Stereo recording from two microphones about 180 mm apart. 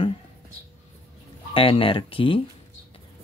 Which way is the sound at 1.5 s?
30° left (ahead or behind).